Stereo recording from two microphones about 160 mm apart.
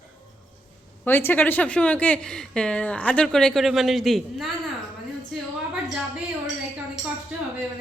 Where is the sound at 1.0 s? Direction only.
15° left (ahead or behind).